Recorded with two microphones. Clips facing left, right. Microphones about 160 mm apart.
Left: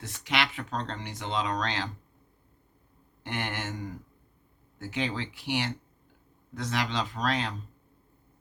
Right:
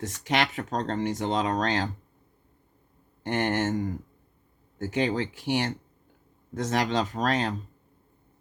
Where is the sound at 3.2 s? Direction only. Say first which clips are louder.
Right 9 dB; 45° right (ahead or behind).